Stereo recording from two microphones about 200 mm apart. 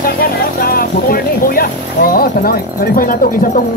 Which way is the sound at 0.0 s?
45° left (ahead or behind).